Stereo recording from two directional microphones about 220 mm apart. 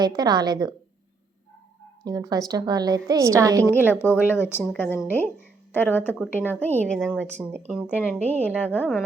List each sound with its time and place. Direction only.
0.0 s a woman's voice: 20° right (ahead or behind)
2.0 s a woman's voice: 15° right (ahead or behind)
3.9 s a woman's voice: 10° left (ahead or behind)